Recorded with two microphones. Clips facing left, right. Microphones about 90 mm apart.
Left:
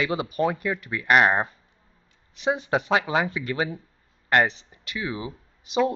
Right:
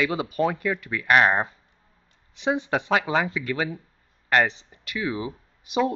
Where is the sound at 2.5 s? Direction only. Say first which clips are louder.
Even; 10° left (ahead or behind).